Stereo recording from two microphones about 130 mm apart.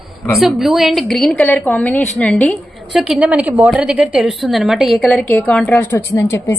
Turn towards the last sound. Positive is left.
turn(degrees=25)  # may be behind; listen again after turning